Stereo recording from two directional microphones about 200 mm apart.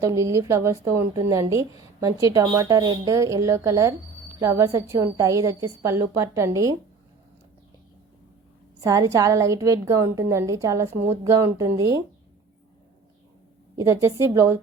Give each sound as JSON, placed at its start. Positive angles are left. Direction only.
{"t": 0.0, "sound": "a woman's voice", "side_deg": -15}
{"t": 8.8, "sound": "a woman's voice", "side_deg": -15}
{"t": 13.7, "sound": "a woman's voice", "side_deg": -15}